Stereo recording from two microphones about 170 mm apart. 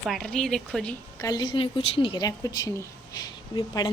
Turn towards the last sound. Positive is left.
turn(degrees=20)  # may be behind; listen again after turning